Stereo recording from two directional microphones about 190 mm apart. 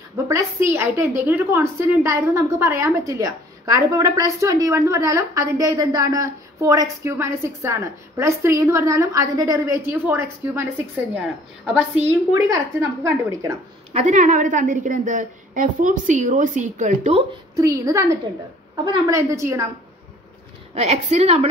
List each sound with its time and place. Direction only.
0.3 s a woman's voice: 15° right (ahead or behind)
13.9 s a woman's voice: 40° right (ahead or behind)
17.6 s a woman's voice: 15° right (ahead or behind)
20.7 s a woman's voice: 35° right (ahead or behind)